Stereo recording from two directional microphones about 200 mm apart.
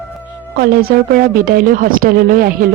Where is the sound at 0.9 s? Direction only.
50° right (ahead or behind).